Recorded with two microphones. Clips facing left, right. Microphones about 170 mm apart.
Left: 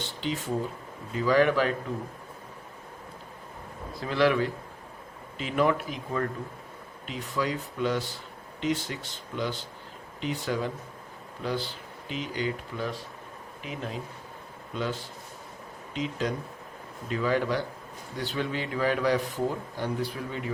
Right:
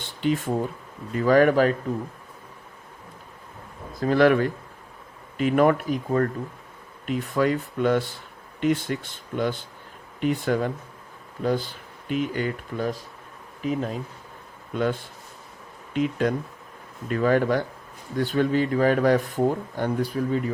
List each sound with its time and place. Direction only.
0.0 s speech: 55° right (ahead or behind)
4.0 s speech: 50° right (ahead or behind)
14.7 s speech: 55° right (ahead or behind)